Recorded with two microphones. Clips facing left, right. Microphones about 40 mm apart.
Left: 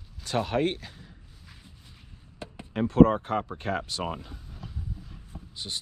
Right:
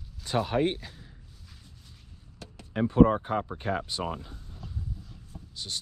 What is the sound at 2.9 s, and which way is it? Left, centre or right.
Speech, left.